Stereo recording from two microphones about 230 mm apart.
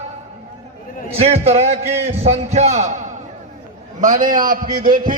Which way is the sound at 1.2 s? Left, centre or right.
Right.